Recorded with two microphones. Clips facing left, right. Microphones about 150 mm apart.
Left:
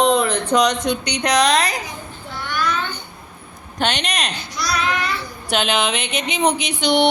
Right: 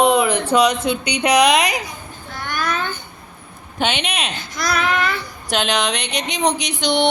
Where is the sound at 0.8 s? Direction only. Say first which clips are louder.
Right 2 dB; 10° right (ahead or behind).